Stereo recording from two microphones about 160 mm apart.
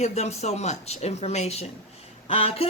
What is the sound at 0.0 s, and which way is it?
A woman's voice, 45° left (ahead or behind).